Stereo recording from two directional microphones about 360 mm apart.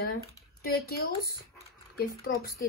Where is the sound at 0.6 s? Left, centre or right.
Left.